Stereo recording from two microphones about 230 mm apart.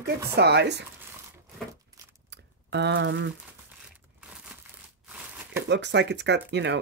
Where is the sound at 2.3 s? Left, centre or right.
Right.